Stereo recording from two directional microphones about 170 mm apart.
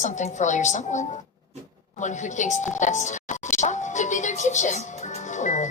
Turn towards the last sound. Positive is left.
turn(degrees=45)  # may be behind; listen again after turning